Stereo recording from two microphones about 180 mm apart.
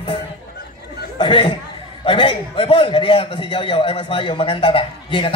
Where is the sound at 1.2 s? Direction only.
25° left (ahead or behind).